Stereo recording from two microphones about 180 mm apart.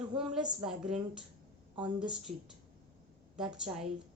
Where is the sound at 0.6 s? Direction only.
5° right (ahead or behind).